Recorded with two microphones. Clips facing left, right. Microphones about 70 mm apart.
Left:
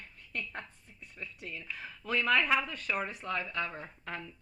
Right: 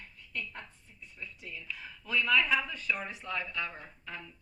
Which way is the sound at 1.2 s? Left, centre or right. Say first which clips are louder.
Left 2 dB; left.